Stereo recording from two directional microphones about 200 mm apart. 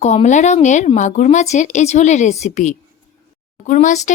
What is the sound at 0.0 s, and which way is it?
Speech, 35° left (ahead or behind).